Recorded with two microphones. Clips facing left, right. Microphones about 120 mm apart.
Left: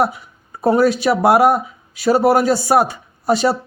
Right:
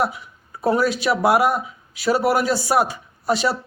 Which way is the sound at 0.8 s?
50° left (ahead or behind).